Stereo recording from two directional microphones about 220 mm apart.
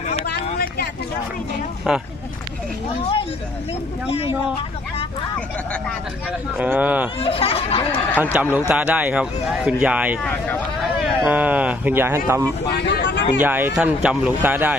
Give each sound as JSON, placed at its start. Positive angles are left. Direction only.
{"t": 0.3, "sound": "vehicle", "side_deg": 45}
{"t": 1.9, "sound": "speech", "side_deg": -5}
{"t": 6.6, "sound": "a man's voice", "side_deg": -5}
{"t": 7.2, "sound": "speech", "side_deg": 25}
{"t": 8.2, "sound": "a man's voice", "side_deg": -10}
{"t": 12.8, "sound": "a sound", "side_deg": 50}
{"t": 13.4, "sound": "a man's voice", "side_deg": -10}